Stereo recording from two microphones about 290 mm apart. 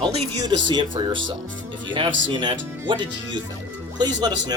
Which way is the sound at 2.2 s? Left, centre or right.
Centre.